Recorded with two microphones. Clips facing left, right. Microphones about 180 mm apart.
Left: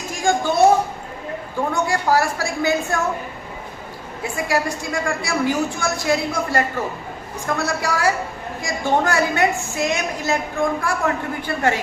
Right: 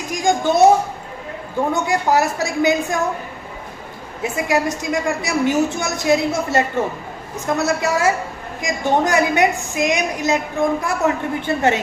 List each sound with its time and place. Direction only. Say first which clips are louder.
0.1 s a sound: right 2 dB; 20° right (ahead or behind)
1.7 s a woman's voice: right 1 dB; 20° right (ahead or behind)
4.2 s a woman's voice: right 3 dB; 20° right (ahead or behind)